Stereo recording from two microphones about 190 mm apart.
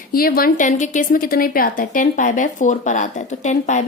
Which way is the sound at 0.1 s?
50° left (ahead or behind).